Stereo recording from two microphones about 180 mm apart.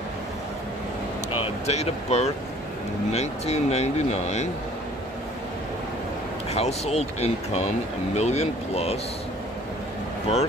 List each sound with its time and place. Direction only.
1.4 s speech: 35° left (ahead or behind)
6.5 s speech: 35° left (ahead or behind)